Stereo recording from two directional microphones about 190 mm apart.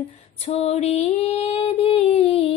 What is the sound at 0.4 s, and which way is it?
Female singing, 35° left (ahead or behind).